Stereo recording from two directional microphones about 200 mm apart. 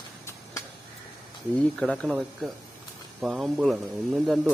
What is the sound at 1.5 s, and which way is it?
Speech, 5° left (ahead or behind).